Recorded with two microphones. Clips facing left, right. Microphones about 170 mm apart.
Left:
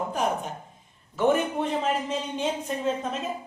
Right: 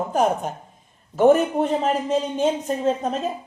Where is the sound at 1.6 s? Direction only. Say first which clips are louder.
Right 5 dB; 40° right (ahead or behind).